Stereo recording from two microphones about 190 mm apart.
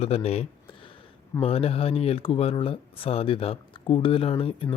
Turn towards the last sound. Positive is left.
turn(degrees=30)  # may be behind; listen again after turning